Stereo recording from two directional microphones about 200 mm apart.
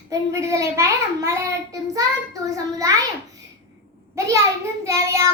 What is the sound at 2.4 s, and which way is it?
Speech, 15° right (ahead or behind).